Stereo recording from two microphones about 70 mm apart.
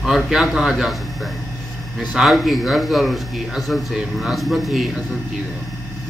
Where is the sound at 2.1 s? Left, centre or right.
Centre.